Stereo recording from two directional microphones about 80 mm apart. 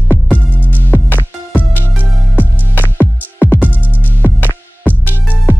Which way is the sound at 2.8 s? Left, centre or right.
Left.